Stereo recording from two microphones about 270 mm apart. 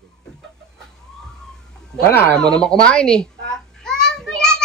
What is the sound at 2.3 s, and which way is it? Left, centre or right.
Babbling, centre.